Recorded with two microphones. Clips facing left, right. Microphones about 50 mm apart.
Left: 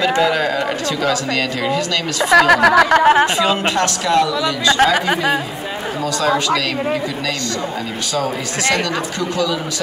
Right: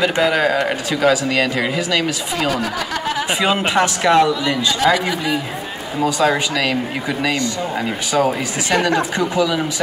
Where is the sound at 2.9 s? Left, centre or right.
Left.